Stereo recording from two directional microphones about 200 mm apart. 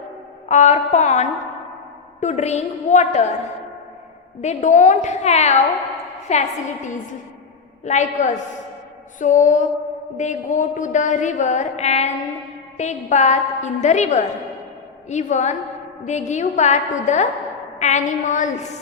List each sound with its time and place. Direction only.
0.4 s mantra: 35° left (ahead or behind)
4.4 s mantra: 35° left (ahead or behind)
7.9 s mantra: 35° left (ahead or behind)